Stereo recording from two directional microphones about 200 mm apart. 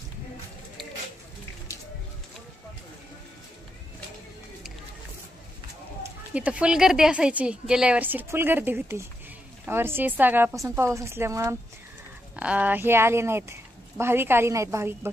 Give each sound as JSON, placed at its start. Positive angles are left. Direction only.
{"t": 1.7, "sound": "music", "side_deg": 15}
{"t": 6.3, "sound": "speech", "side_deg": -5}